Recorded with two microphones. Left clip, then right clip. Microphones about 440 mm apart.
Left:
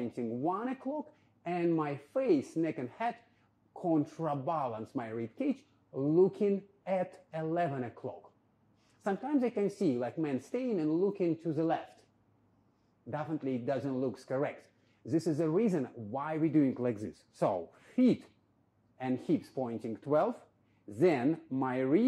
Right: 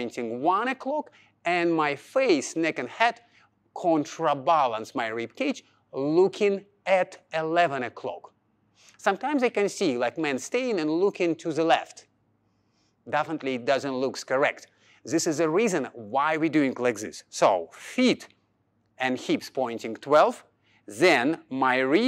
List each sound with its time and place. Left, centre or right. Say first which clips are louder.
0.0 s speech: right 8 dB; centre
3.7 s speech: right 8 dB; centre
4.0 s speech: right 10 dB; centre
5.5 s speech: right 6 dB; centre
6.3 s speech: right 7 dB; centre
9.0 s speech: right 9 dB; centre
12.0 s a sound: right 13 dB; centre
13.1 s speech: right 9 dB; centre